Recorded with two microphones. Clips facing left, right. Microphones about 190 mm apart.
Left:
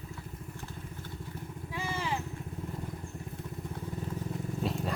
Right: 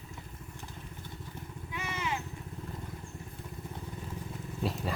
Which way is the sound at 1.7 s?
30° left (ahead or behind).